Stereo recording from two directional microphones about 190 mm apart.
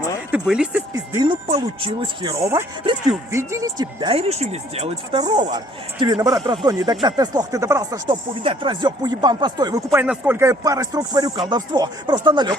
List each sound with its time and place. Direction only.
0.3 s speech: 5° right (ahead or behind)
0.9 s speech: 20° right (ahead or behind)